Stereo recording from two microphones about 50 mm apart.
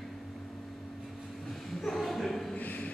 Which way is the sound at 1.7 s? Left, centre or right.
Centre.